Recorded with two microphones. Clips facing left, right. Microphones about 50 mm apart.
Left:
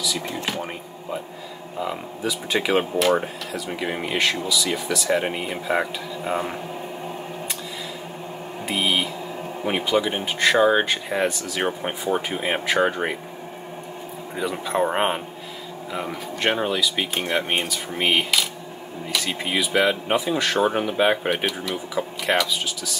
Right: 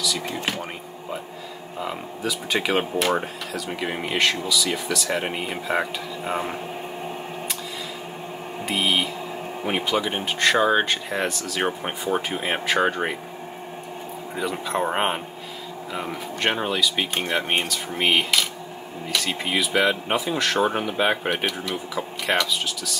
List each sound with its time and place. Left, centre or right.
2.2 s speech: centre
8.6 s speech: centre
14.3 s speech: centre